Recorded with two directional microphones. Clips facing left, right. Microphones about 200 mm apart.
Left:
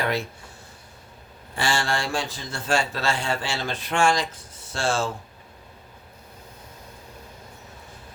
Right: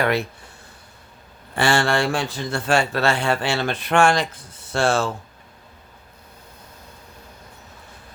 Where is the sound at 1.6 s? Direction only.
60° right (ahead or behind).